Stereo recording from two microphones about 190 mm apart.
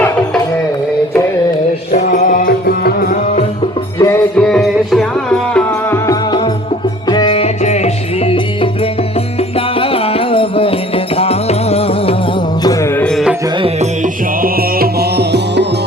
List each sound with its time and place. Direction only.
1.9 s music: 45° left (ahead or behind)
3.9 s music: 15° left (ahead or behind)
4.4 s music: 5° left (ahead or behind)
6.1 s music: 25° left (ahead or behind)
12.6 s music: 15° left (ahead or behind)
13.6 s music: 35° right (ahead or behind)
14.4 s music: 50° right (ahead or behind)